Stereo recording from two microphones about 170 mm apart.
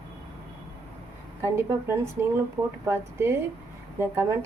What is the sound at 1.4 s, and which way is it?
A woman's voice, 15° right (ahead or behind).